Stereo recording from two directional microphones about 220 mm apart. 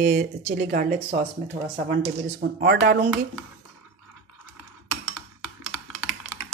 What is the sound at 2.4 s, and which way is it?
Speech, 45° right (ahead or behind).